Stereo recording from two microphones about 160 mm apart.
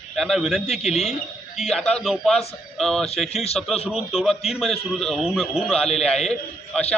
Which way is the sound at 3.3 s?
40° left (ahead or behind).